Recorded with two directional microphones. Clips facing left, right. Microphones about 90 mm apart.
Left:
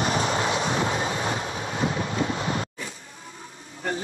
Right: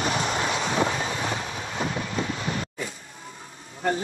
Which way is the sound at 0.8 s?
35° left (ahead or behind).